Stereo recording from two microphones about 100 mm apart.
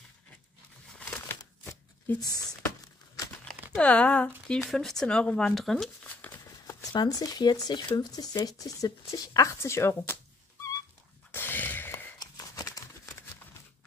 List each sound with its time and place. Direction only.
0.9 s crumpling: 15° left (ahead or behind)
1.6 s shuffling cards: 20° left (ahead or behind)
2.1 s speech: 40° left (ahead or behind)
3.7 s speech: 10° left (ahead or behind)
6.0 s a sound: 15° left (ahead or behind)
6.4 s speech: 35° left (ahead or behind)
11.3 s a sound: 20° left (ahead or behind)
12.2 s crumpling: 35° left (ahead or behind)